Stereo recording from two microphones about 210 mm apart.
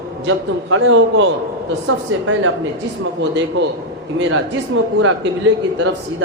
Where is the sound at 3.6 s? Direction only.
60° right (ahead or behind).